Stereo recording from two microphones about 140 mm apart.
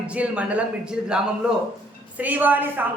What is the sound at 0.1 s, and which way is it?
A woman's voice, 10° right (ahead or behind).